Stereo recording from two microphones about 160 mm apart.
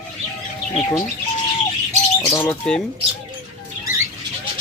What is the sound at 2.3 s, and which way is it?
Speech, 15° left (ahead or behind).